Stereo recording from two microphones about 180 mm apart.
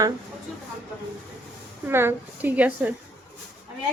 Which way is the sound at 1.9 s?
15° right (ahead or behind).